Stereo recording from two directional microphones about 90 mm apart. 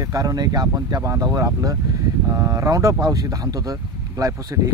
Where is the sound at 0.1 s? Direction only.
40° right (ahead or behind).